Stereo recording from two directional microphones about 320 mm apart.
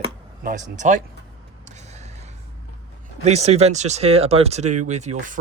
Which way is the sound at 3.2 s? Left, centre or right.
Right.